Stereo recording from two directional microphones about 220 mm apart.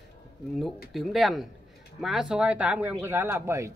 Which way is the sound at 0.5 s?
Centre (ahead or behind).